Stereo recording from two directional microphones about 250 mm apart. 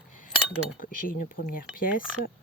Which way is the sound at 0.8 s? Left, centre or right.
Left.